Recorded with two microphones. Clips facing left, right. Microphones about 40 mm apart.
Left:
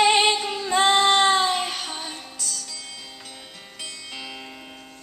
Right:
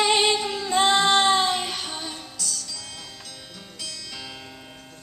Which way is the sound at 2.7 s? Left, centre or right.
Left.